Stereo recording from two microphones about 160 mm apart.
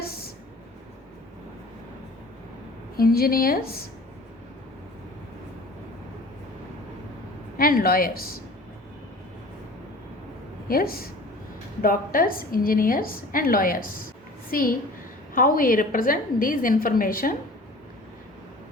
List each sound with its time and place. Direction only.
3.0 s speech: 65° left (ahead or behind)
7.5 s speech: 65° left (ahead or behind)
10.7 s a woman's voice: 70° left (ahead or behind)